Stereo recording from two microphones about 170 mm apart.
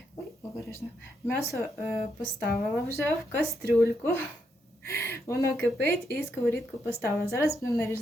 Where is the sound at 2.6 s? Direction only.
15° left (ahead or behind).